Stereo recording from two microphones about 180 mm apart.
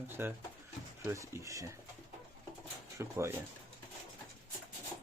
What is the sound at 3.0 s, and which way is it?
Speech, 15° right (ahead or behind).